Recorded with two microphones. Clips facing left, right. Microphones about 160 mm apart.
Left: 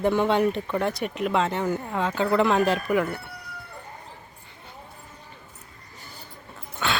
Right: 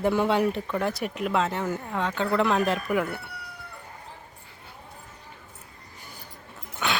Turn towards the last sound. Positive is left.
turn(degrees=-15)  # may be behind; listen again after turning